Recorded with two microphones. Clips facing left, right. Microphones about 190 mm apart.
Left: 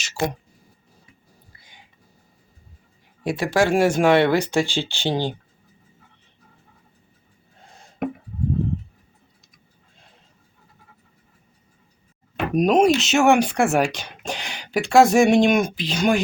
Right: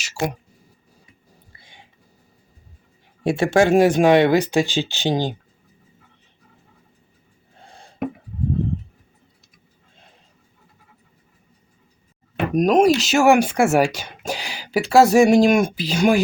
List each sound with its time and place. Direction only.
0.0 s speech: 10° right (ahead or behind)
1.5 s a sound: 25° right (ahead or behind)
3.2 s speech: 25° right (ahead or behind)
12.5 s speech: centre (ahead or behind)